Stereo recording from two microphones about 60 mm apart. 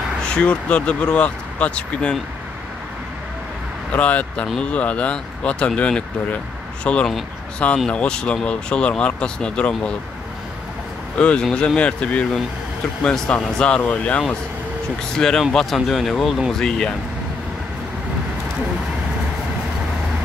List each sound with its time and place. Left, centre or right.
0.2 s speech: centre
3.9 s speech: left
11.1 s speech: centre
15.1 s speech: centre